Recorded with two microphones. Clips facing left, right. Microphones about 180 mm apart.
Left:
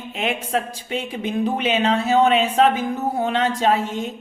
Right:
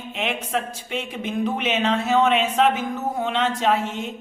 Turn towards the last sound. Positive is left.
turn(degrees=35)  # may be behind; listen again after turning